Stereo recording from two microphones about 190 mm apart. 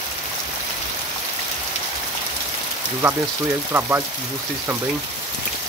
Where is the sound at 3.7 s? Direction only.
10° right (ahead or behind).